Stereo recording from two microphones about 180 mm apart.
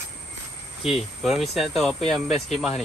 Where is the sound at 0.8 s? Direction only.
Centre (ahead or behind).